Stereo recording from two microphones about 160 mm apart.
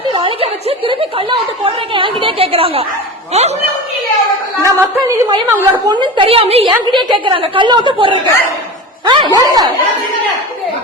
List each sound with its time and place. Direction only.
0.1 s a woman's voice: 30° right (ahead or behind)
4.6 s a woman's voice: 20° right (ahead or behind)
5.8 s a woman's voice: 30° right (ahead or behind)